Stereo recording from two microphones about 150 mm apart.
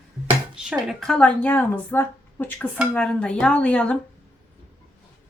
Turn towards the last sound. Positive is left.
turn(degrees=5)  # may be behind; listen again after turning